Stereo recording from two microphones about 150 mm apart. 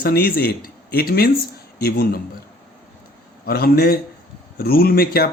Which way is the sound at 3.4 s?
90° left.